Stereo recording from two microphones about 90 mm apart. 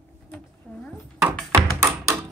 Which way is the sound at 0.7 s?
25° left (ahead or behind).